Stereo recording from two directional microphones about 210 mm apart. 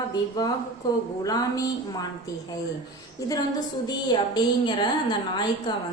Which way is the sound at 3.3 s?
20° left (ahead or behind).